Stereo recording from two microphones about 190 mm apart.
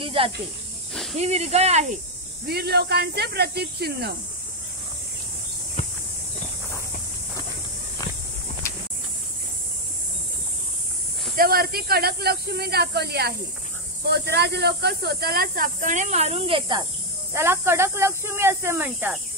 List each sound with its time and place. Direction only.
0.0 s snake: 30° right (ahead or behind)
1.1 s speech: 35° right (ahead or behind)
2.4 s speech: 55° right (ahead or behind)
11.3 s speech: 50° right (ahead or behind); by 16.8 s 25° right (ahead or behind)
17.3 s speech: 15° right (ahead or behind)